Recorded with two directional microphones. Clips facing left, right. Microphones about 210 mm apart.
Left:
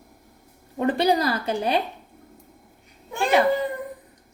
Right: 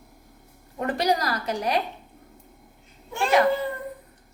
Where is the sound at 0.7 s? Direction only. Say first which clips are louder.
Left 4 dB; 30° left (ahead or behind).